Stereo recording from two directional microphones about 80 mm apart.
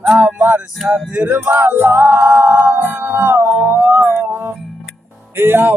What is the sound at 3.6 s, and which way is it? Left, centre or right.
Howl, right.